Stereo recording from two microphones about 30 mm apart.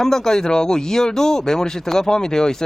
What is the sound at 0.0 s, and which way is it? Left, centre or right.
Speech, centre.